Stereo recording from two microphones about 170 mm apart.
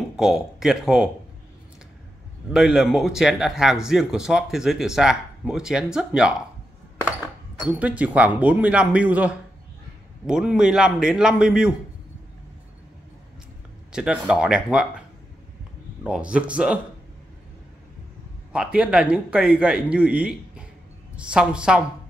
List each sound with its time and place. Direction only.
0.2 s speech: centre (ahead or behind)
2.5 s speech: centre (ahead or behind)
7.6 s a man's voice: 10° right (ahead or behind)
13.9 s a man's voice: 5° right (ahead or behind)
18.5 s a man's voice: 5° right (ahead or behind)